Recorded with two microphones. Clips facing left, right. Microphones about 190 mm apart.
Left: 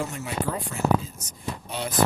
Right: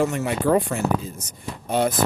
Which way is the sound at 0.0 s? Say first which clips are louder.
Right 8 dB; 70° right (ahead or behind).